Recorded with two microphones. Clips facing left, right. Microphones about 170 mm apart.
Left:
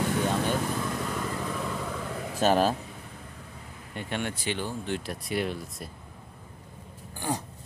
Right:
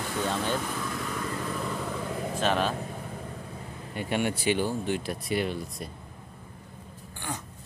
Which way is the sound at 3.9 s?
10° right (ahead or behind).